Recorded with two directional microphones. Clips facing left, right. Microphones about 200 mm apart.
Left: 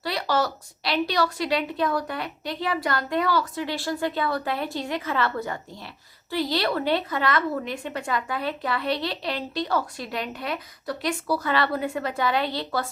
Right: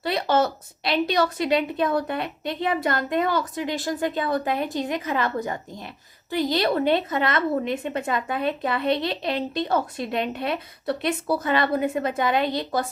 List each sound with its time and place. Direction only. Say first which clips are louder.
0.0 s a woman's voice: right 3 dB; 25° right (ahead or behind)